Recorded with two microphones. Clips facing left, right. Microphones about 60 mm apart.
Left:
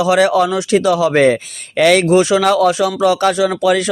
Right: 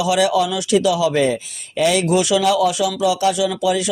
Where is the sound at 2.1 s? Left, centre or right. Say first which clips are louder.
Left 5 dB; left.